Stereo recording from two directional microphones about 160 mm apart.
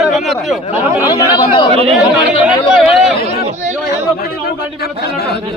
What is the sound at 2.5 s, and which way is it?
Speech, 5° right (ahead or behind).